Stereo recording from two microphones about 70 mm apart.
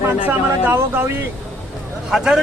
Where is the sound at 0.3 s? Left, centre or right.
Right.